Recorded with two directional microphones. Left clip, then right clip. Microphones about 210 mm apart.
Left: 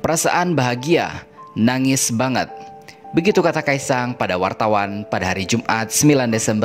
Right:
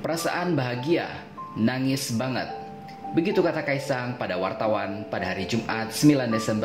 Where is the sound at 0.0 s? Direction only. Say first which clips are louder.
Left 9 dB; 50° left (ahead or behind).